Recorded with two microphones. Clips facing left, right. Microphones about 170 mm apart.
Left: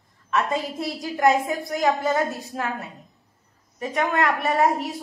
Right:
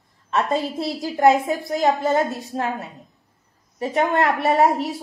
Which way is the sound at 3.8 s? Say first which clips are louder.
Right 3 dB; 30° right (ahead or behind).